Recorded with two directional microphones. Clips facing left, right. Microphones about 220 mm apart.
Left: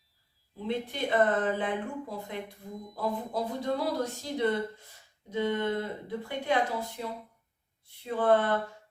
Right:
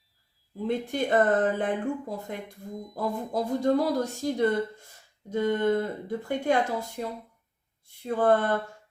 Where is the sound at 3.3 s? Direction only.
45° right (ahead or behind).